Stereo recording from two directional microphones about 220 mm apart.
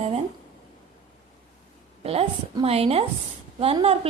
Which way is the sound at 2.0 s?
25° right (ahead or behind).